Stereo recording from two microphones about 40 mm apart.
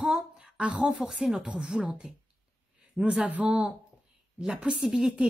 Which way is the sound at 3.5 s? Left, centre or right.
Right.